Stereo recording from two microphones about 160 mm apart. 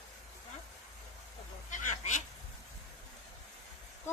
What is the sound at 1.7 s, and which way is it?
Fowl, 50° left (ahead or behind).